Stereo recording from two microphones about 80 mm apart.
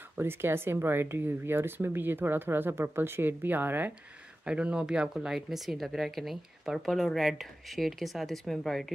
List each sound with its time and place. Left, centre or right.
0.2 s speech: right
4.5 s speech: centre